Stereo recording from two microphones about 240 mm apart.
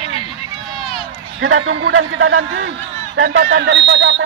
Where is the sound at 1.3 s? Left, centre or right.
Right.